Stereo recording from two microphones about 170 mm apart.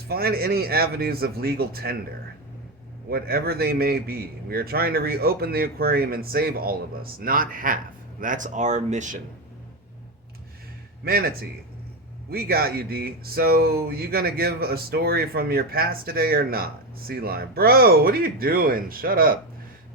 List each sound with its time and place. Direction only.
0.1 s speech: 65° right (ahead or behind)
3.1 s speech: 60° right (ahead or behind); by 9.0 s 45° right (ahead or behind)
11.0 s speech: 60° right (ahead or behind)